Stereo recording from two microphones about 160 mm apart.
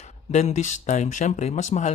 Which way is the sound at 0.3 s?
45° left (ahead or behind).